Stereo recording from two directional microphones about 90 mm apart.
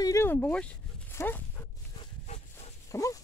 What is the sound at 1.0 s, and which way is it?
Dog, 20° left (ahead or behind).